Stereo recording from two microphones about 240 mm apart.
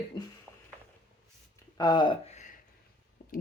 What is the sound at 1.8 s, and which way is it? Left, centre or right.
Speech, centre.